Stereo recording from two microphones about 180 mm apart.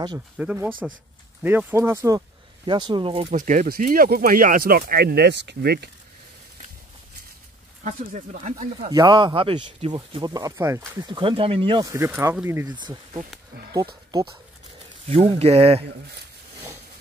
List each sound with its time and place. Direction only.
0.4 s speech: 10° right (ahead or behind); by 3.3 s 30° right (ahead or behind)
3.3 s speech: 45° right (ahead or behind); by 5.9 s 65° right (ahead or behind)
7.8 s speech: 45° right (ahead or behind)
8.9 s speech: 20° right (ahead or behind)
11.9 s speech: 15° right (ahead or behind)
12.6 s speech: 25° right (ahead or behind)